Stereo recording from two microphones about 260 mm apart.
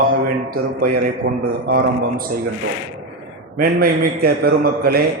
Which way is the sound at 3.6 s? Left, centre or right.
Right.